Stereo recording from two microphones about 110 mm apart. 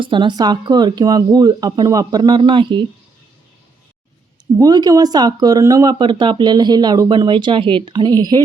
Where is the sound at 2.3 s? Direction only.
50° right (ahead or behind).